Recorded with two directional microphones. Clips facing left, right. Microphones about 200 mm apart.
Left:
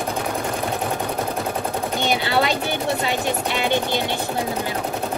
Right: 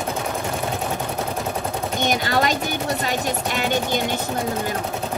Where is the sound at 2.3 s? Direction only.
45° right (ahead or behind).